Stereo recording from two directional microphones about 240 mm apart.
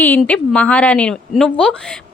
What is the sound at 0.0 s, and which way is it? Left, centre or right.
Speech, centre.